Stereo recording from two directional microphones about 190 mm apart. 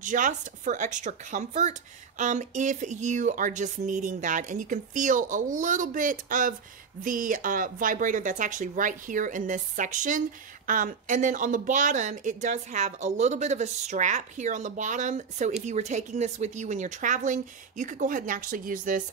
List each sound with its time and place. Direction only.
0.0 s speech: 40° right (ahead or behind)